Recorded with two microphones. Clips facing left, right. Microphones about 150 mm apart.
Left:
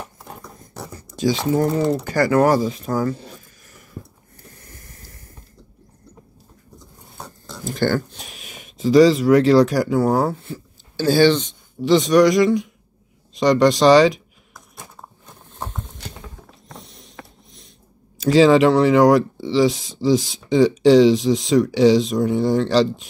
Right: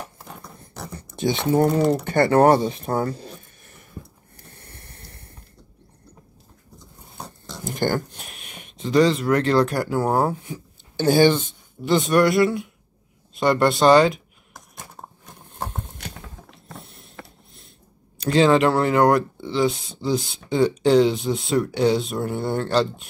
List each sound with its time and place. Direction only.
0.6 s a sound: 25° right (ahead or behind)
2.0 s speech: 25° right (ahead or behind)
4.5 s spray: 30° right (ahead or behind)
7.6 s speech: 15° right (ahead or behind)
8.3 s speech: centre (ahead or behind)
10.4 s a sound: 15° right (ahead or behind)
11.3 s speech: 5° right (ahead or behind)
16.8 s a sound: 10° right (ahead or behind)
18.1 s speech: centre (ahead or behind)
19.4 s speech: 90° left
21.3 s speech: 5° right (ahead or behind)